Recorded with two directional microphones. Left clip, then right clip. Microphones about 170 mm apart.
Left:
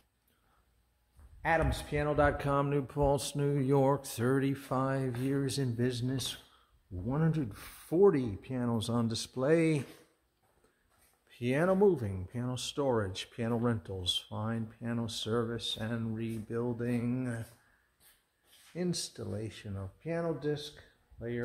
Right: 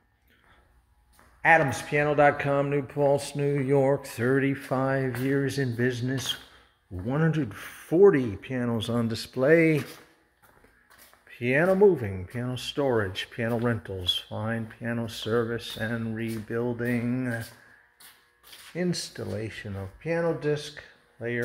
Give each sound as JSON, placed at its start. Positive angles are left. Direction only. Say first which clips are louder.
{"t": 1.9, "sound": "speech", "louder": "right 8 dB", "side_deg": 10}
{"t": 2.5, "sound": "speech", "louder": "right 5 dB", "side_deg": 25}
{"t": 4.2, "sound": "speech", "louder": "right 6 dB", "side_deg": 15}
{"t": 11.3, "sound": "speech", "louder": "right 7 dB", "side_deg": 10}
{"t": 18.8, "sound": "speech", "louder": "right 6 dB", "side_deg": 0}